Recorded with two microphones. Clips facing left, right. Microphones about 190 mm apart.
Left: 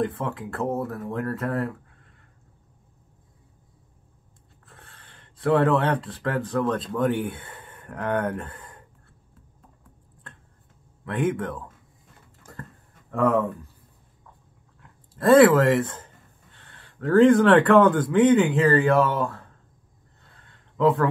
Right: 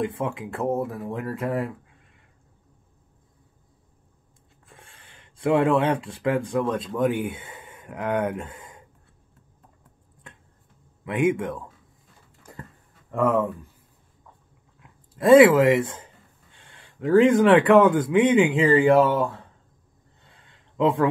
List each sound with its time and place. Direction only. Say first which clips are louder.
0.0 s speech: even; 10° right (ahead or behind)
4.6 s speech: even; 10° right (ahead or behind)
11.1 s speech: right 3 dB; 10° right (ahead or behind)
13.1 s speech: even; 5° right (ahead or behind)
14.8 s speech: right 3 dB; 10° right (ahead or behind)
20.7 s speech: even; 15° right (ahead or behind)